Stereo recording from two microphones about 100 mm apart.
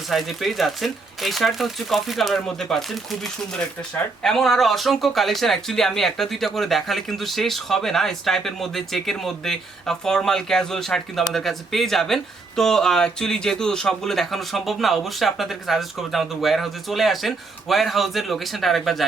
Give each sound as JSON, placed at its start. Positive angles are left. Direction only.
{"t": 0.1, "sound": "speech", "side_deg": 0}
{"t": 4.2, "sound": "speech", "side_deg": 5}